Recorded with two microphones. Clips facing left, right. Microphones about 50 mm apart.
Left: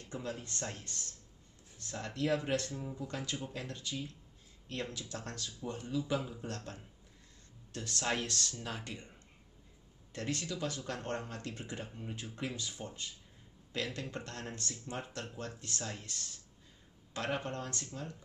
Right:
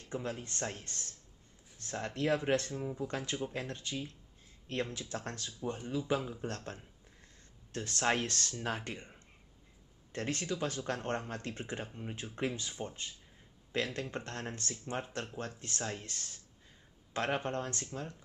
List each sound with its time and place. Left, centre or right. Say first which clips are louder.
0.1 s speech: right 3 dB; right
2.7 s speech: right 4 dB; right
3.1 s speech: right 3 dB; right
10.1 s speech: right 2 dB; right